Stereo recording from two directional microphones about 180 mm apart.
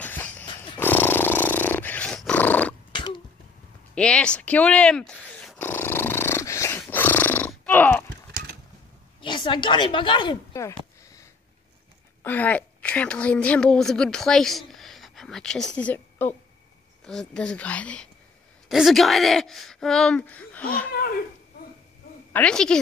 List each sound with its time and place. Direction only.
0.0 s a sound: 10° left (ahead or behind)
0.7 s dog: 10° left (ahead or behind)
2.9 s a sound: 25° left (ahead or behind)
3.9 s dog: 5° left (ahead or behind)
6.8 s grunt: 10° left (ahead or behind)
9.2 s a woman's voice: 25° left (ahead or behind); by 20.9 s 10° left (ahead or behind)
22.3 s speech: 5° left (ahead or behind)